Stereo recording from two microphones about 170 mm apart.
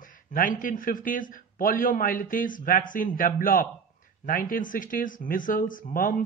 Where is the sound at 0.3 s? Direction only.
50° left (ahead or behind).